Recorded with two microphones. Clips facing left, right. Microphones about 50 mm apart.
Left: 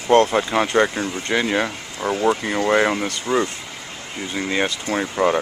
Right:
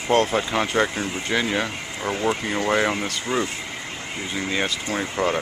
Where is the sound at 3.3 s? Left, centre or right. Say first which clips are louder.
Left 4 dB; centre.